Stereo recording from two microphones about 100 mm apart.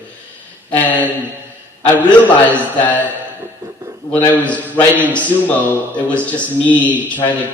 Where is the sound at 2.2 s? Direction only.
15° left (ahead or behind).